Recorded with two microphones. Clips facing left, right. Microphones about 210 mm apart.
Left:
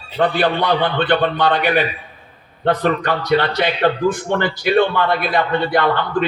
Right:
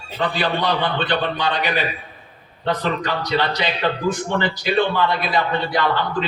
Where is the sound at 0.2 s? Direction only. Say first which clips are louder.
Left 5 dB; 55° left (ahead or behind).